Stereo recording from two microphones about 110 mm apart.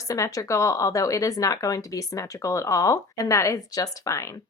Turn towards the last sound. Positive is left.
turn(degrees=30)  # may be behind; listen again after turning